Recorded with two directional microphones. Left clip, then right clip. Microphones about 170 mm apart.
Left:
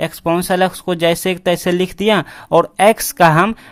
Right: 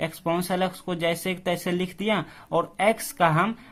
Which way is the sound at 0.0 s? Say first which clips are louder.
Left 9 dB; 35° left (ahead or behind).